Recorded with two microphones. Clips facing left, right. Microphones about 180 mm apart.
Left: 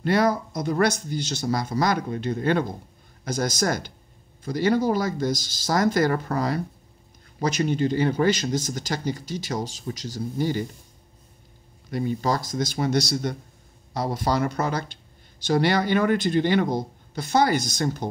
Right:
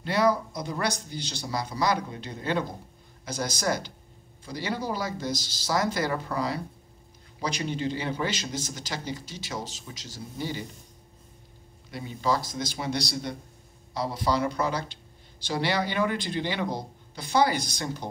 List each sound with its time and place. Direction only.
0.0 s speech: 50° left (ahead or behind)
11.9 s speech: 50° left (ahead or behind)